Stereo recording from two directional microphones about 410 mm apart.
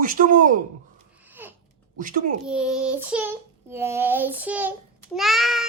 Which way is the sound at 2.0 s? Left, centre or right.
Centre.